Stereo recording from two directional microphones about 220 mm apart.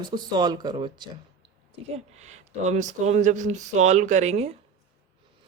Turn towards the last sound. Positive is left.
turn(degrees=-30)  # may be behind; listen again after turning